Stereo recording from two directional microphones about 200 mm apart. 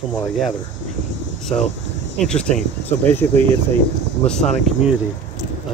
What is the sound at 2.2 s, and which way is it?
Speech, 5° left (ahead or behind).